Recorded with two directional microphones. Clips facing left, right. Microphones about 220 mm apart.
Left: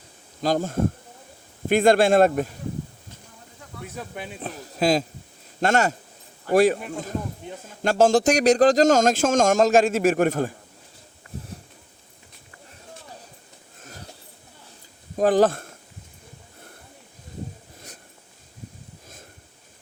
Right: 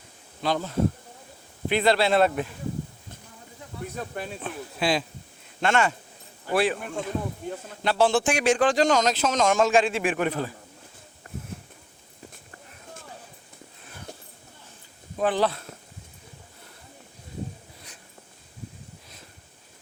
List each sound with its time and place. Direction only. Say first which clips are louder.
0.4 s a man's voice: left 2 dB; 45° left (ahead or behind)
4.4 s a man's voice: left 8 dB; 40° left (ahead or behind)
13.8 s a sound: left 4 dB; 40° left (ahead or behind)
15.1 s speech: left 6 dB; 40° left (ahead or behind)